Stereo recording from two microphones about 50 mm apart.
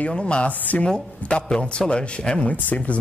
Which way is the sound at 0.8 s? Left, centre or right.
Left.